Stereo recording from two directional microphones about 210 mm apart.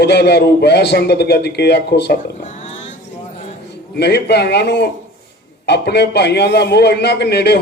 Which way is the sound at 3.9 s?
50° left (ahead or behind).